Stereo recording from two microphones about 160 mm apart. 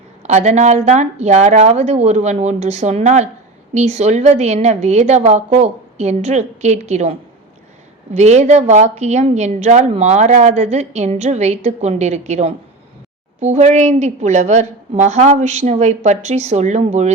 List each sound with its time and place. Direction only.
0.2 s a woman's voice: 45° right (ahead or behind)